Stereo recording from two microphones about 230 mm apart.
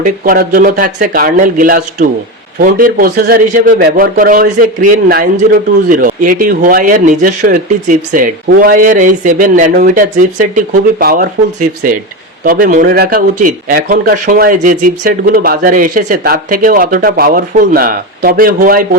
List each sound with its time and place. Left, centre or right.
0.0 s a man's voice: right